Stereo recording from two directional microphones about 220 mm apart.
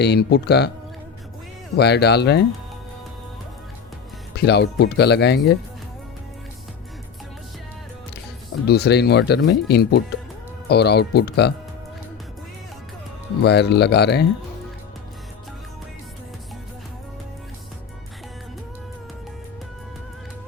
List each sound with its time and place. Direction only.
0.0 s speech: 50° left (ahead or behind)
1.7 s speech: 50° left (ahead or behind)
4.4 s speech: 50° left (ahead or behind)
8.6 s speech: 50° left (ahead or behind)
13.4 s speech: 50° left (ahead or behind)